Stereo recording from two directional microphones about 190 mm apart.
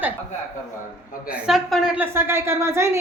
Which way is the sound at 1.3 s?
Centre (ahead or behind).